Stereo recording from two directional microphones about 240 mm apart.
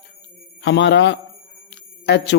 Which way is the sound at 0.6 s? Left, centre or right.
Left.